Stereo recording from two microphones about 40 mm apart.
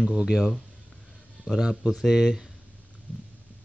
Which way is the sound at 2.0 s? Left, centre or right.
Centre.